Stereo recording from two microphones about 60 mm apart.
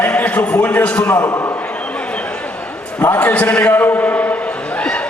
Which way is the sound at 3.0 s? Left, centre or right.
Left.